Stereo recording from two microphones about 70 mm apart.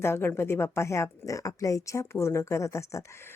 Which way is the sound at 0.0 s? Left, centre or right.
Left.